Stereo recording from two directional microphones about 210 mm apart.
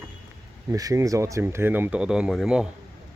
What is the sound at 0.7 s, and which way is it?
Speech, 15° right (ahead or behind).